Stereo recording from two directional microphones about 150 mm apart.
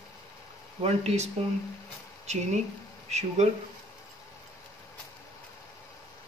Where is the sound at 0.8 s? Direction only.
45° right (ahead or behind).